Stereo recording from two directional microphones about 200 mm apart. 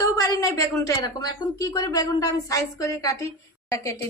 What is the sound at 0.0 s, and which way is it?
Speech, 15° left (ahead or behind).